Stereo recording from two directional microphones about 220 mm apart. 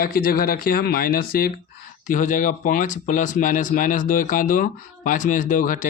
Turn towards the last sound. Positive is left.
turn(degrees=35)  # may be behind; listen again after turning